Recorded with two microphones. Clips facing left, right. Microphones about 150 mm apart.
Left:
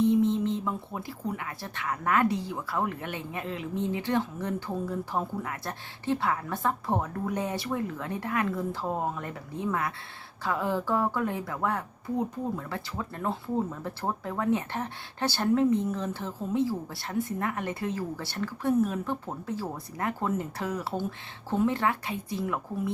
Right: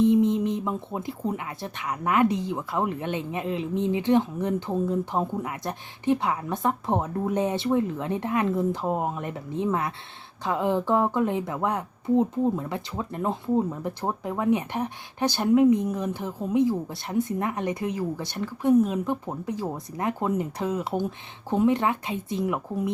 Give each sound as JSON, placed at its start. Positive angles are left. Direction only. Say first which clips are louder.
{"t": 0.0, "sound": "a woman's voice", "louder": "right 3 dB", "side_deg": -20}